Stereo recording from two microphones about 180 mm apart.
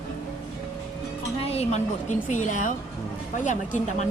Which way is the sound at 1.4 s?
35° left (ahead or behind).